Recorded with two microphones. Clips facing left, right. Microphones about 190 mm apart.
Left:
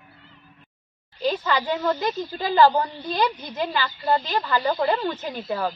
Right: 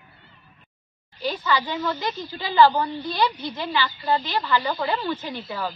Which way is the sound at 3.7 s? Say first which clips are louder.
Even; 40° left (ahead or behind).